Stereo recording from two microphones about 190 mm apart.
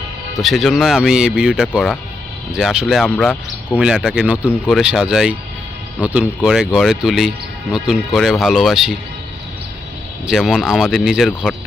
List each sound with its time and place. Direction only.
0.4 s speech: centre (ahead or behind)
10.2 s speech: centre (ahead or behind)